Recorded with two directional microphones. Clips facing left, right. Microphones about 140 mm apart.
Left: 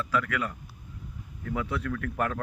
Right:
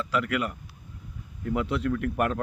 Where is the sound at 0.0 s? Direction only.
25° right (ahead or behind).